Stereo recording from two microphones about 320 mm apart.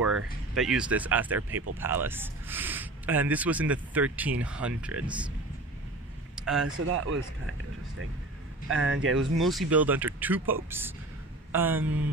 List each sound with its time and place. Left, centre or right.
0.0 s speech: centre
6.3 s a sound: centre
8.6 s speech: right
9.4 s speech: centre